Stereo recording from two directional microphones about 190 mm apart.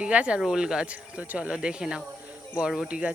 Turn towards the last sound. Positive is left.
turn(degrees=-5)  # may be behind; listen again after turning